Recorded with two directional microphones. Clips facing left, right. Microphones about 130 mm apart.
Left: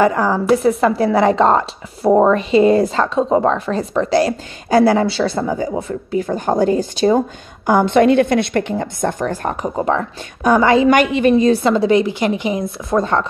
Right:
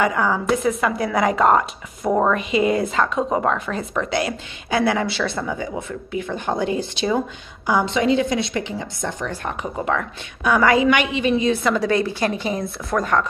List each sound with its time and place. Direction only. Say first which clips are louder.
0.0 s a woman's voice: left 5 dB; 35° left (ahead or behind)
10.9 s a woman's voice: left 6 dB; 45° left (ahead or behind)
11.6 s a woman's voice: left 6 dB; 25° left (ahead or behind)